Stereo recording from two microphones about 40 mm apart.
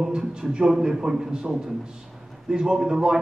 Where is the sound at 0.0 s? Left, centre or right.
Centre.